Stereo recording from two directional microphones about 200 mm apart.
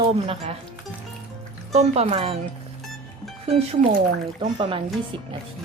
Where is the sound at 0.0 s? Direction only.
30° right (ahead or behind).